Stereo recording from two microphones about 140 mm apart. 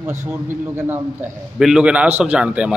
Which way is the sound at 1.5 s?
5° right (ahead or behind).